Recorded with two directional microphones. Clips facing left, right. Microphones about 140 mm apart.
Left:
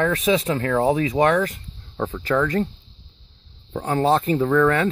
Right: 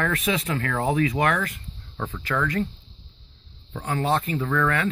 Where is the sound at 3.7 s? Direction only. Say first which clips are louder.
Left 5 dB; 25° left (ahead or behind).